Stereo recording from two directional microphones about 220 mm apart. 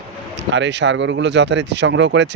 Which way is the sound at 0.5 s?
55° right (ahead or behind).